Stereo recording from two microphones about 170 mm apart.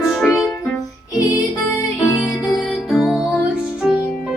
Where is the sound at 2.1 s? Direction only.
Centre (ahead or behind).